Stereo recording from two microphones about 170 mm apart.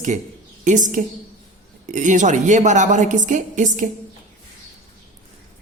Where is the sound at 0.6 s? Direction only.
45° right (ahead or behind).